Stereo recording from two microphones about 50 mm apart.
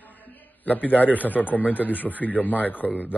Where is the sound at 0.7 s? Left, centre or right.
Left.